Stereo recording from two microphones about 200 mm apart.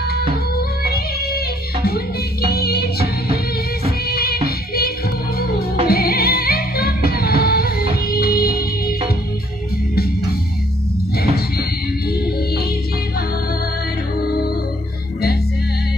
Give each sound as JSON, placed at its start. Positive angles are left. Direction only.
{"t": 0.6, "sound": "music", "side_deg": 50}
{"t": 2.4, "sound": "music", "side_deg": 50}
{"t": 11.1, "sound": "music", "side_deg": 50}